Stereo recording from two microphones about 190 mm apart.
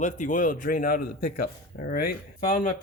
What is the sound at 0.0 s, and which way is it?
Speech, 40° left (ahead or behind).